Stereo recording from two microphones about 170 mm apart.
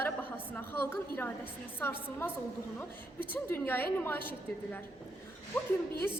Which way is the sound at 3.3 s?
10° left (ahead or behind).